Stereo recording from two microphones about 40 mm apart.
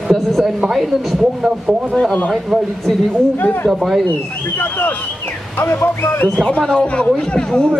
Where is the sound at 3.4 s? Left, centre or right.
Left.